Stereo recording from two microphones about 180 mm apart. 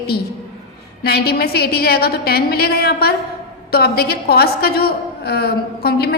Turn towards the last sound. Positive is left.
turn(degrees=60)  # may be behind; listen again after turning